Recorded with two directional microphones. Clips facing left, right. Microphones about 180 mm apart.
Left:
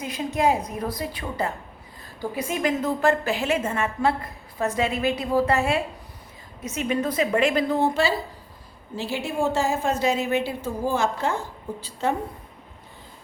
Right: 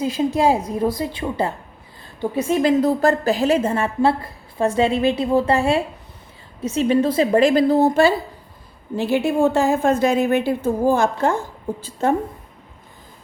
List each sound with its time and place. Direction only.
0.0 s a woman's voice: 30° right (ahead or behind)
9.0 s a woman's voice: 60° right (ahead or behind)